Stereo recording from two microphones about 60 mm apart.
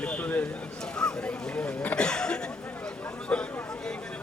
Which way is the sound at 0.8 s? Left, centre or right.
Centre.